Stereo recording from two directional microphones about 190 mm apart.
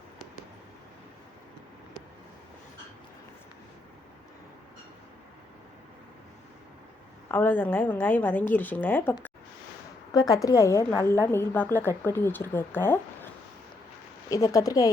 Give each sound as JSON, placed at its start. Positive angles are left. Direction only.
{"t": 7.3, "sound": "a woman's voice", "side_deg": 10}
{"t": 14.3, "sound": "speech", "side_deg": 20}